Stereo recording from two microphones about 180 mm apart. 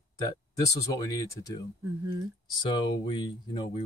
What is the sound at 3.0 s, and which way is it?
Speech, 25° left (ahead or behind).